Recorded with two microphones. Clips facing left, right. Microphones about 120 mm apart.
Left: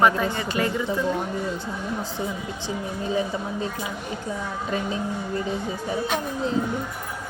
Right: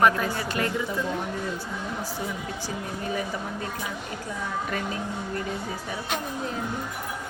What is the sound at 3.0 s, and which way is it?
Speech, 25° left (ahead or behind).